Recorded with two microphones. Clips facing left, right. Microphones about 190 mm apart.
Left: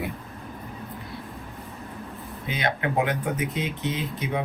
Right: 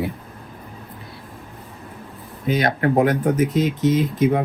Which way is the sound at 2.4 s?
45° right (ahead or behind).